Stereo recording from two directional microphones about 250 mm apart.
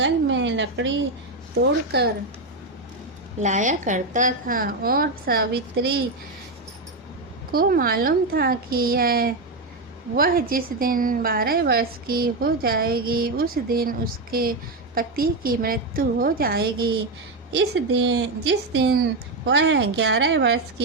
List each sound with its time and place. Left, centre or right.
0.0 s a sound: right
1.9 s a woman's voice: right
3.4 s a woman's voice: right
7.5 s a woman's voice: right